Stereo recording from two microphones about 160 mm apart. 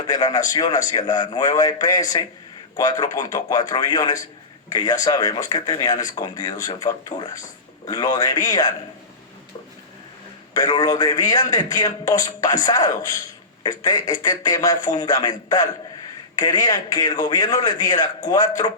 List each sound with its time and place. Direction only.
0.0 s speech: 25° left (ahead or behind)
10.5 s speech: 25° left (ahead or behind)